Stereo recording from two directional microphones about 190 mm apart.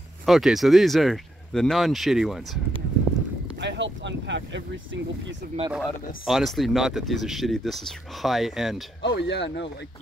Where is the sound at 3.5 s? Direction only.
70° right (ahead or behind).